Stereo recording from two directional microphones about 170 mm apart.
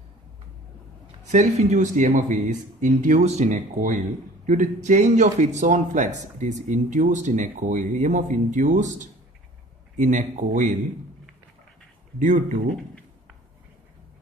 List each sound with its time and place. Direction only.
1.2 s a man's voice: 45° right (ahead or behind)
12.2 s a man's voice: 50° right (ahead or behind)